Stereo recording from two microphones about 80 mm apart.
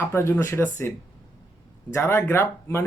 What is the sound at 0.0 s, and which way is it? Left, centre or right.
Speech, left.